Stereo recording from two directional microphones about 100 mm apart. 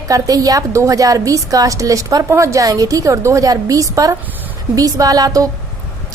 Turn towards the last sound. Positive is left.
turn(degrees=-35)  # may be behind; listen again after turning